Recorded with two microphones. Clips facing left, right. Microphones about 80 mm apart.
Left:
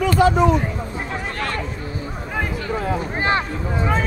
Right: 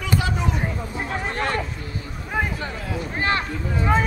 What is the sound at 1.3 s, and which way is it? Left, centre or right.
Chatter, right.